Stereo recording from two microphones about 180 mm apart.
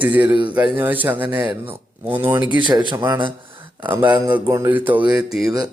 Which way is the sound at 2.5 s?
25° right (ahead or behind).